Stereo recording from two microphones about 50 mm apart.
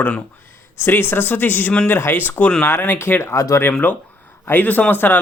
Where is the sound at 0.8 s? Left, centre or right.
Left.